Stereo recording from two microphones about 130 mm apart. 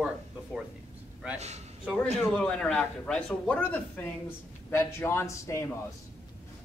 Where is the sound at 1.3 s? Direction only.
60° right (ahead or behind).